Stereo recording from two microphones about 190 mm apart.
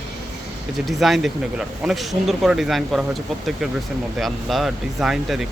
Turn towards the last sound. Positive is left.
turn(degrees=0)  # may be behind; listen again after turning